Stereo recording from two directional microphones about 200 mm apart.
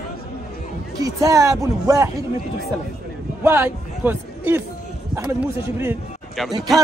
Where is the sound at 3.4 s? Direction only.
10° right (ahead or behind).